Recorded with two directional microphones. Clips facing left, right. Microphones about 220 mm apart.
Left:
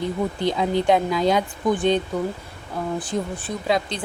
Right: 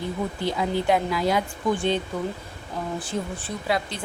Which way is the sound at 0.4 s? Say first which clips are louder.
Left 4 dB; 20° left (ahead or behind).